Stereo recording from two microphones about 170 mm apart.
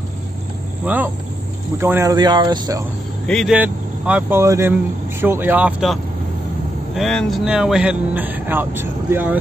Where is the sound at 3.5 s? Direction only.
10° right (ahead or behind).